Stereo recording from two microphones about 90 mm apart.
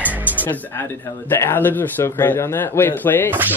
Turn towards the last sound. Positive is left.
turn(degrees=-20)  # may be behind; listen again after turning